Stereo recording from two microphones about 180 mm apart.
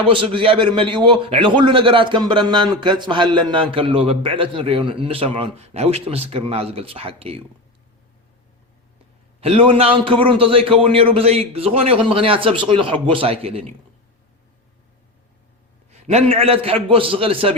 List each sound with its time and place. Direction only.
0.1 s a man's voice: 30° right (ahead or behind)
9.4 s a man's voice: 30° right (ahead or behind)
15.9 s a man's voice: 35° right (ahead or behind)